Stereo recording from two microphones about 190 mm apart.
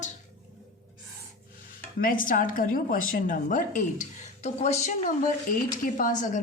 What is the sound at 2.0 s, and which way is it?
A woman's voice, 45° left (ahead or behind).